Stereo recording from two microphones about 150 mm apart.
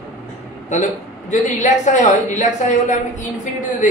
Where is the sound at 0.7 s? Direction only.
55° left (ahead or behind).